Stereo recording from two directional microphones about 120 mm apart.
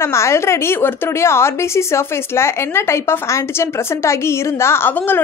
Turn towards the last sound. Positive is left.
turn(degrees=15)  # may be behind; listen again after turning